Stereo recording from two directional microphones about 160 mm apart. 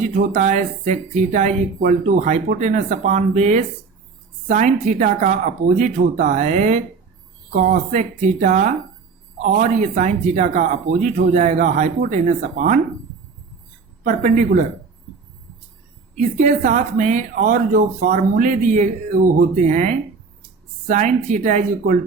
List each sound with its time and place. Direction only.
0.1 s speech: 50° right (ahead or behind)
14.0 s speech: 55° right (ahead or behind)
16.1 s speech: 50° right (ahead or behind)